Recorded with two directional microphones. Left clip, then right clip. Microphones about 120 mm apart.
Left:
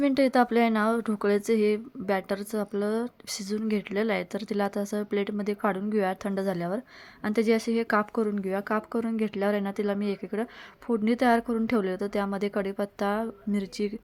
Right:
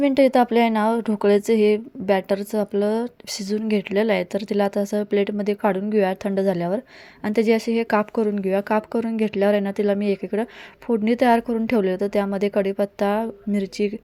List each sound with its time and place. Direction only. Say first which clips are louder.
0.0 s speech: right 6 dB; 20° right (ahead or behind)